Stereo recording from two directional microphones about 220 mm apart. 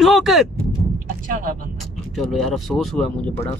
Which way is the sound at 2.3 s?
Centre (ahead or behind).